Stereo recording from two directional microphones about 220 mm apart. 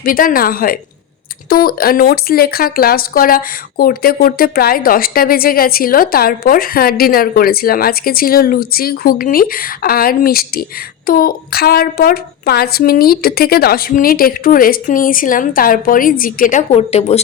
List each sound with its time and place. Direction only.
0.0 s speech: 40° left (ahead or behind)